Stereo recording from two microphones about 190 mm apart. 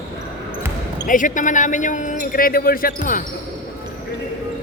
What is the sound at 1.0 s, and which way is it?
Speech, 45° left (ahead or behind).